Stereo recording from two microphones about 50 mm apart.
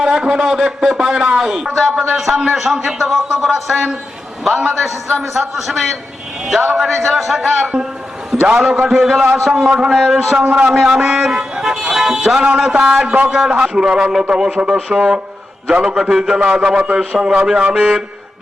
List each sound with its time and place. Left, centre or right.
0.2 s a man's voice: centre
4.8 s a man's voice: centre
10.4 s a man's voice: centre